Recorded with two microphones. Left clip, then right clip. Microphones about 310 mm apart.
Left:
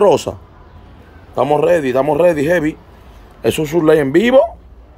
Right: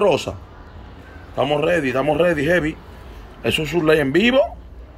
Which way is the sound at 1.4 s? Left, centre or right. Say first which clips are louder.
Left 6 dB; centre.